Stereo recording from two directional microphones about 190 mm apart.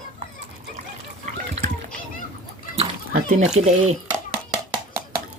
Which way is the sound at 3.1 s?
40° right (ahead or behind).